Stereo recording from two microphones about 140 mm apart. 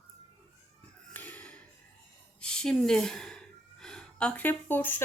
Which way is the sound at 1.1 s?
10° left (ahead or behind).